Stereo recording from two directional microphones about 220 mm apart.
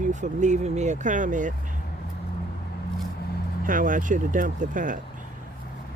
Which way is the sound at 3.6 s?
40° right (ahead or behind).